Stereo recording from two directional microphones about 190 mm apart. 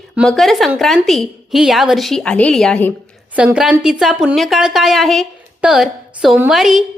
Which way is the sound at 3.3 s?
5° right (ahead or behind).